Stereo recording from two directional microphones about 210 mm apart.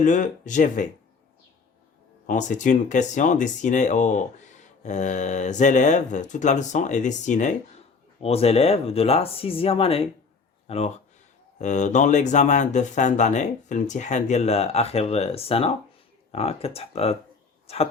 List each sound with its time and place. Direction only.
0.0 s speech: 35° left (ahead or behind)
2.2 s speech: 35° left (ahead or behind)